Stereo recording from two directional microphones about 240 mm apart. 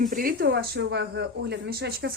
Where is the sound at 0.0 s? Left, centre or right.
Right.